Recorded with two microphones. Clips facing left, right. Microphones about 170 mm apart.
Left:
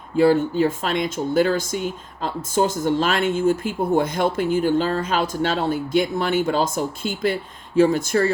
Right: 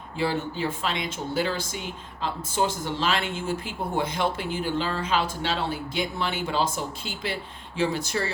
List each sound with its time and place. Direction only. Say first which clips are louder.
0.2 s speech: left 11 dB; 45° left (ahead or behind)